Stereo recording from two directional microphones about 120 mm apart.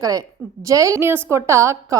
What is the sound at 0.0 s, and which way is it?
Speech, 30° right (ahead or behind).